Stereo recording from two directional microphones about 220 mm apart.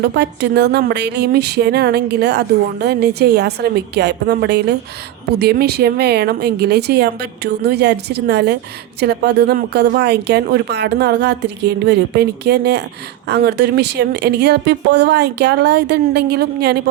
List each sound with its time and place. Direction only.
0.0 s speech: 50° right (ahead or behind)